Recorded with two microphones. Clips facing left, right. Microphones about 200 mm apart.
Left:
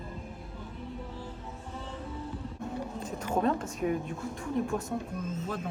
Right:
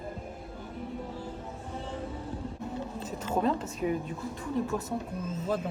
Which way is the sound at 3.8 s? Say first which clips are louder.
Even; 10° right (ahead or behind).